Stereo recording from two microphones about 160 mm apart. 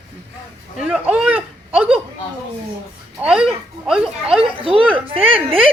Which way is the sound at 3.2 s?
5° right (ahead or behind).